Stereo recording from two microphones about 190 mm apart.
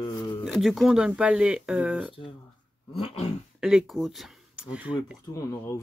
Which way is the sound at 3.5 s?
Centre (ahead or behind).